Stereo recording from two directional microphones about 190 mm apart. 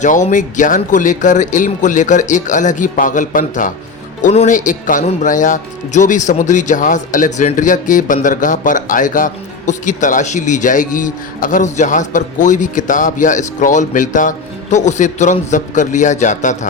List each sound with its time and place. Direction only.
0.0 s speech: 40° left (ahead or behind)